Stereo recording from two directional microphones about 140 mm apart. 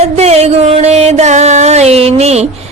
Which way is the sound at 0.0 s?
50° right (ahead or behind).